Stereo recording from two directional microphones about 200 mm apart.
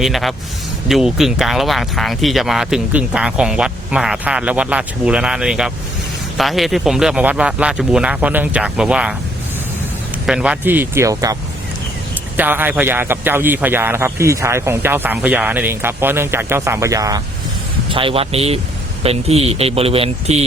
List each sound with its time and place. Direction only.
0.0 s speech: centre (ahead or behind)
10.2 s a man's voice: 5° right (ahead or behind)
12.4 s a man's voice: 10° right (ahead or behind); by 20.4 s 30° right (ahead or behind)